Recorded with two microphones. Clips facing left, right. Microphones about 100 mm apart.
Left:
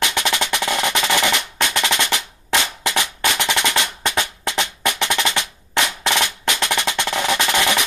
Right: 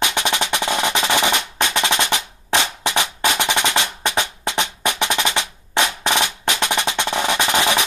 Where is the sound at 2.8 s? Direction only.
20° right (ahead or behind).